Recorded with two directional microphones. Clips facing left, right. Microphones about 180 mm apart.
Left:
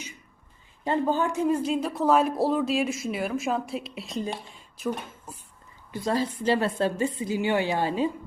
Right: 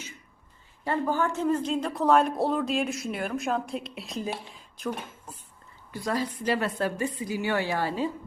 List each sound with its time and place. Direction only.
0.9 s speech: 20° left (ahead or behind)
5.9 s a woman's voice: 25° left (ahead or behind)